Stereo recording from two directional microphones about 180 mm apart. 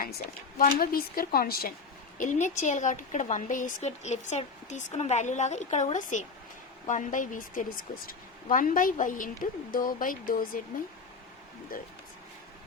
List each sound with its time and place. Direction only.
0.6 s speech: 55° left (ahead or behind)
2.1 s a woman's voice: 45° left (ahead or behind)